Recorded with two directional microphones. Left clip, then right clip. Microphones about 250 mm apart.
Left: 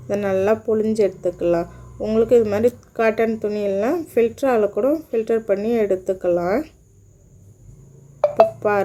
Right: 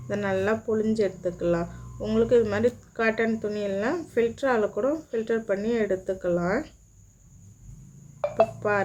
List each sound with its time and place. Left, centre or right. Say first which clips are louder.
0.1 s speech: left 7 dB; centre
8.2 s music: left 10 dB; left
8.6 s speech: left 6 dB; centre